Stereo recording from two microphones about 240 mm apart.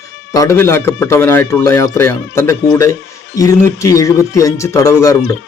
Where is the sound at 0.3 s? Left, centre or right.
Centre.